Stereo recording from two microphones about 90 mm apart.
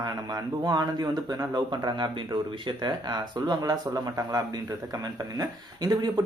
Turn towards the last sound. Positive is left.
turn(degrees=-50)  # may be behind; listen again after turning